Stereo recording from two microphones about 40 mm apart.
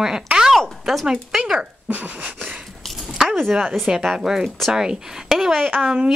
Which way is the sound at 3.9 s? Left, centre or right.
Centre.